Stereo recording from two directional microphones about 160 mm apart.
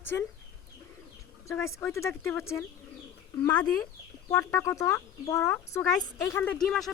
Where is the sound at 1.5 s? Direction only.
15° left (ahead or behind).